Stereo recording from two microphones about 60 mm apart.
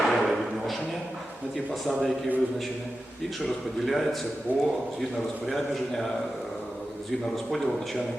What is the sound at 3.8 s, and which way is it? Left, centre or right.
Speech, centre.